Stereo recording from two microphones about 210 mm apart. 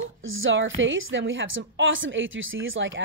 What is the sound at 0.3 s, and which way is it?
A woman's voice, 65° right (ahead or behind).